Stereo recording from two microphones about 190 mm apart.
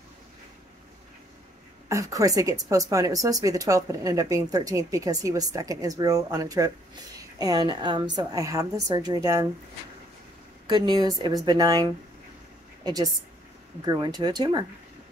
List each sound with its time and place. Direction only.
1.9 s a woman's voice: 15° right (ahead or behind)
10.7 s a woman's voice: 20° right (ahead or behind)